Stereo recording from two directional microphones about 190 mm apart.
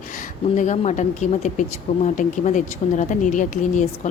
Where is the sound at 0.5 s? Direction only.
40° left (ahead or behind).